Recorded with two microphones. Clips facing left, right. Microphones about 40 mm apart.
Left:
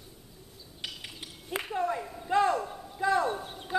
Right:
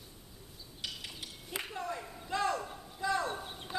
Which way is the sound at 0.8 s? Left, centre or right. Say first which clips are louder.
Left 2 dB; left.